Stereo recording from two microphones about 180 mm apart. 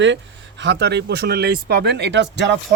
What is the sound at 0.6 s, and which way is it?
Speech, 70° right (ahead or behind).